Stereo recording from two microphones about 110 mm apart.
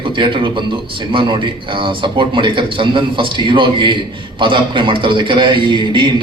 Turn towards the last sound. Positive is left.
turn(degrees=-45)  # may be behind; listen again after turning